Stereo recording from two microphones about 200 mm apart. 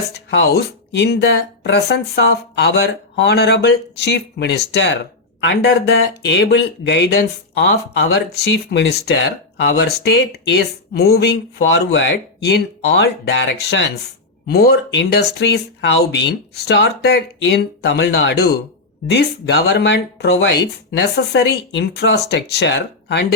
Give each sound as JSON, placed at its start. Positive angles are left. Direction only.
{"t": 0.3, "sound": "speech", "side_deg": 55}